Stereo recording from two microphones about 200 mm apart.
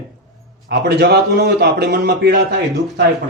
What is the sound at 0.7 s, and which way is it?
A man's voice, 55° right (ahead or behind).